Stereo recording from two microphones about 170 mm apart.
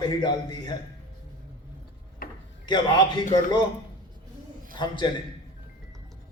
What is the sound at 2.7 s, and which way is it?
Speech, 25° left (ahead or behind).